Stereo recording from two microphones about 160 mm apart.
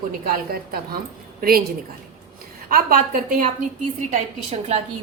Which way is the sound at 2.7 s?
65° right (ahead or behind).